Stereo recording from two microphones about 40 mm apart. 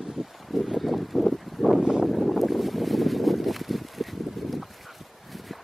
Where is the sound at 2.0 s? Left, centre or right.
Centre.